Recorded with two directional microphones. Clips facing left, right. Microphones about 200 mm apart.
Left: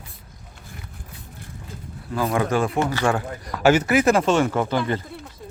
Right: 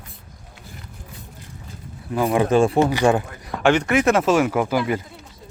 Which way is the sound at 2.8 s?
15° right (ahead or behind).